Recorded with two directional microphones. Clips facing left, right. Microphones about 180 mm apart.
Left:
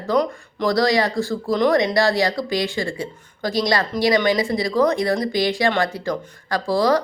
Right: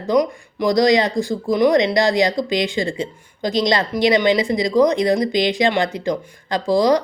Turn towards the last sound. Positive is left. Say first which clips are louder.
# right 3 dB
turn(degrees=-15)  # may be behind; listen again after turning